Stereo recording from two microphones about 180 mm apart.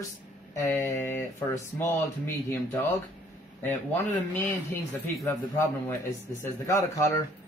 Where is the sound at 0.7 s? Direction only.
15° left (ahead or behind).